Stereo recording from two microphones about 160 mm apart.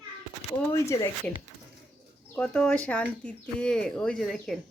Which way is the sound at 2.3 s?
10° left (ahead or behind).